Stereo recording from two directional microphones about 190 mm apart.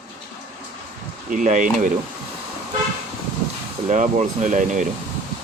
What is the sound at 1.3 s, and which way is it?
Speech, 40° right (ahead or behind).